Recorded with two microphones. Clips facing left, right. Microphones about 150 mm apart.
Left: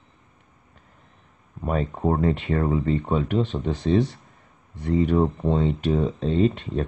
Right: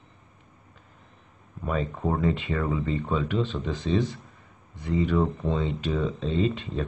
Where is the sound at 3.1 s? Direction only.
55° left (ahead or behind).